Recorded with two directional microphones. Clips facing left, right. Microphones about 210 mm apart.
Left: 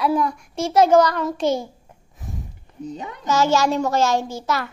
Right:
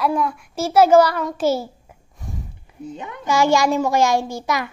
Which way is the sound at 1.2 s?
5° right (ahead or behind).